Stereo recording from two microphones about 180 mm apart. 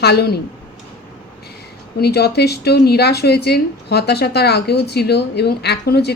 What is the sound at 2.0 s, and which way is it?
Speech, 65° left (ahead or behind).